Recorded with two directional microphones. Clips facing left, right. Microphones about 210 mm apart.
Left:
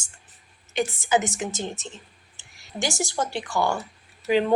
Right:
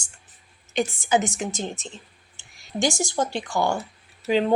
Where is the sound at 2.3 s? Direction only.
15° right (ahead or behind).